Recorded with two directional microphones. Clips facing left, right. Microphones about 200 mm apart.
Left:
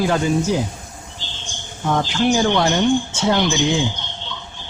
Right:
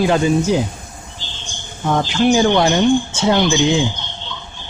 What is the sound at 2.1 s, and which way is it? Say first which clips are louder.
Speech: right 5 dB; 20° right (ahead or behind).